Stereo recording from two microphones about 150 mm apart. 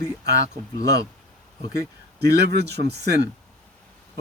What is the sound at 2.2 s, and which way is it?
Speech, 90° right.